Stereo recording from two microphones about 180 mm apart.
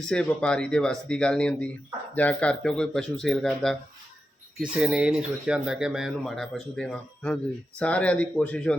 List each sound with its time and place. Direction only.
0.1 s speech: 5° left (ahead or behind)